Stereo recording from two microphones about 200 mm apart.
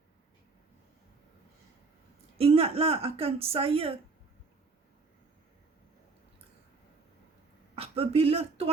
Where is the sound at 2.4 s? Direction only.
30° right (ahead or behind).